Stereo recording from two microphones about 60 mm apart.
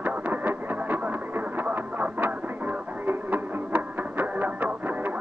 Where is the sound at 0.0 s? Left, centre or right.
Right.